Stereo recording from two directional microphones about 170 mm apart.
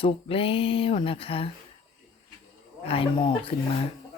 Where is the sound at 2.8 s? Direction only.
35° left (ahead or behind).